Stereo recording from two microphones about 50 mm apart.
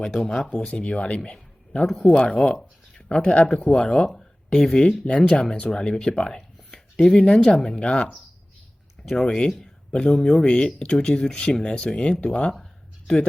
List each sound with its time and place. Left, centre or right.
0.0 s speech: centre
0.7 s speech: left
2.6 s a sound: centre
3.3 s speech: centre
5.0 s speech: left
9.2 s speech: centre